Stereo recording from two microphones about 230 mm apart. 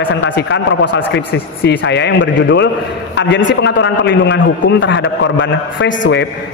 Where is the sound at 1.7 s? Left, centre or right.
Left.